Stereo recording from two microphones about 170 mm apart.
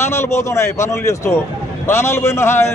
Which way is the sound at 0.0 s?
15° left (ahead or behind).